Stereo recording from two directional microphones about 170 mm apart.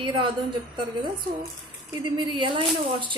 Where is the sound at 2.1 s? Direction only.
30° right (ahead or behind).